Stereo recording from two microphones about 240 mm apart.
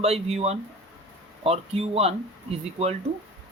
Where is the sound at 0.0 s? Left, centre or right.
Right.